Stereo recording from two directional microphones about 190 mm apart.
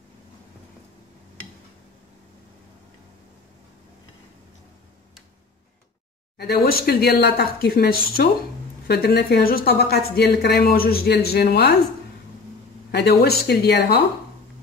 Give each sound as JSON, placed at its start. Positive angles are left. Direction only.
{"t": 6.3, "sound": "a man's voice", "side_deg": 55}
{"t": 12.9, "sound": "a man's voice", "side_deg": 60}